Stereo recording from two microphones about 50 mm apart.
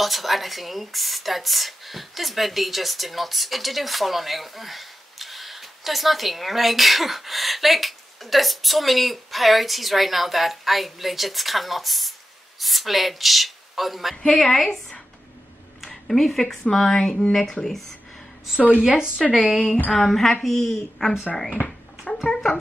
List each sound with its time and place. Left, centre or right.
0.0 s speech: centre
14.1 s a woman's voice: centre
14.4 s speech: centre
18.8 s speech: centre
20.0 s speech: centre
21.6 s a sound: centre